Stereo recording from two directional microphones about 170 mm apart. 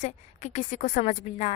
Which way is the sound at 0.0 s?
45° left (ahead or behind).